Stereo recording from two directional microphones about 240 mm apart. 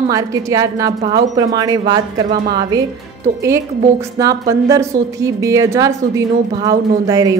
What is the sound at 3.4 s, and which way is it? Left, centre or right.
A woman's voice, centre.